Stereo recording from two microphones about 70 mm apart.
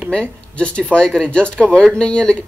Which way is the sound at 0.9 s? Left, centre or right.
Centre.